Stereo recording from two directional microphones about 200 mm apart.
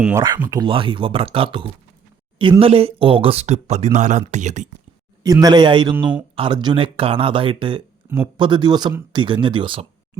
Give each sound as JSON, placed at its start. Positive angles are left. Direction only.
{"t": 0.3, "sound": "speech", "side_deg": -10}
{"t": 0.6, "sound": "speech", "side_deg": -25}
{"t": 5.2, "sound": "speech", "side_deg": -20}